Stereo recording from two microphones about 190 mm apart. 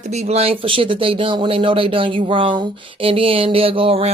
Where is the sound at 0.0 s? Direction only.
35° right (ahead or behind).